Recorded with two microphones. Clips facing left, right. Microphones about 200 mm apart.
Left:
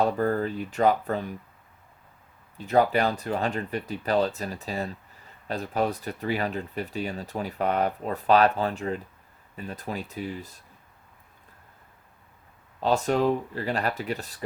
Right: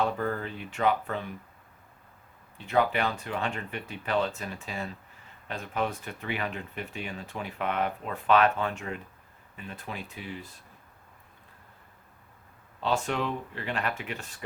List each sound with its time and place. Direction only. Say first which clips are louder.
0.0 s speech: left 5 dB; 40° left (ahead or behind)
2.6 s speech: left 4 dB; 40° left (ahead or behind)
12.8 s speech: left 6 dB; 40° left (ahead or behind)